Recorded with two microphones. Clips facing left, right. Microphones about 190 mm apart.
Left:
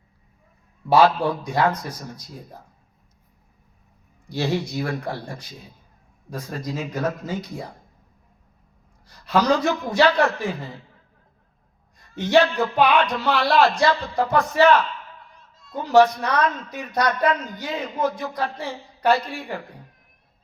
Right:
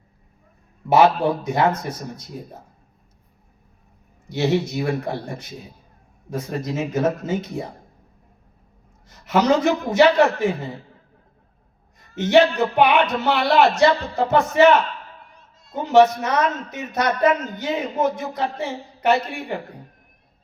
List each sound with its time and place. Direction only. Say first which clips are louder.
0.9 s a man's voice: right 1 dB; 20° right (ahead or behind)
4.3 s a man's voice: right 4 dB; 20° right (ahead or behind)
9.0 s a man's voice: right 2 dB; 20° right (ahead or behind)
12.1 s a man's voice: right 2 dB; 20° right (ahead or behind)